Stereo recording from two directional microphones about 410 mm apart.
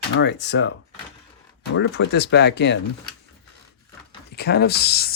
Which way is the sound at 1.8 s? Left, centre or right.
Left.